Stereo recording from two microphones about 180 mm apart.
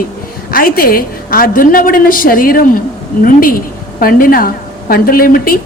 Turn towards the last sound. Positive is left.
turn(degrees=55)  # may be behind; listen again after turning